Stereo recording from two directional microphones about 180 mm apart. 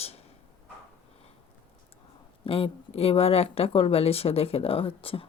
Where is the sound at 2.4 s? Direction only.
30° left (ahead or behind).